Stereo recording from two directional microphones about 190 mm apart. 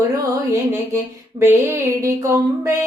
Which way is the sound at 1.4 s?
15° right (ahead or behind).